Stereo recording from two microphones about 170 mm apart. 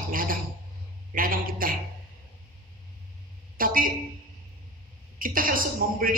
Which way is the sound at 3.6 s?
55° right (ahead or behind).